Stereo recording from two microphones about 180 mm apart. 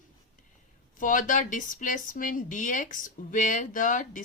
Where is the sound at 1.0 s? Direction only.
45° left (ahead or behind).